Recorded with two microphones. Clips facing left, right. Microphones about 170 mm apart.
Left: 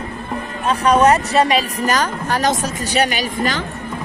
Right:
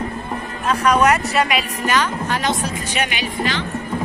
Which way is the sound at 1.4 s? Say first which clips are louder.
Left 4 dB; 35° left (ahead or behind).